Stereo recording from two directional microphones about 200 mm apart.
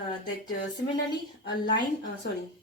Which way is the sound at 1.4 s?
60° left (ahead or behind).